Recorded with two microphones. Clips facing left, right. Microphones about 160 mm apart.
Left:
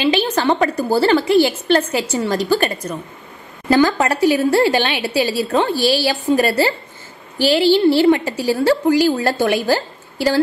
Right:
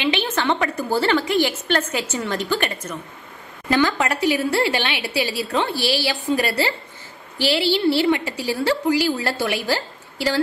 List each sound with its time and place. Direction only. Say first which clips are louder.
0.0 s a woman's voice: left 5 dB; 35° left (ahead or behind)